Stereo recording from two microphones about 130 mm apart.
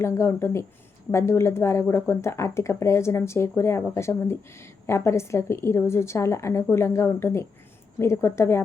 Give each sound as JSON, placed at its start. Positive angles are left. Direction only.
{"t": 0.0, "sound": "speech", "side_deg": 20}